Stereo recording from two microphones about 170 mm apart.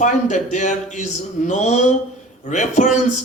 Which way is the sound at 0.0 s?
45° left (ahead or behind).